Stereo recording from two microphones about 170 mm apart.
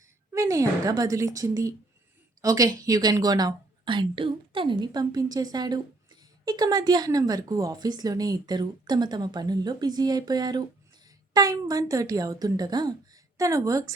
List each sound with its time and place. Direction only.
0.3 s a woman's voice: 20° right (ahead or behind)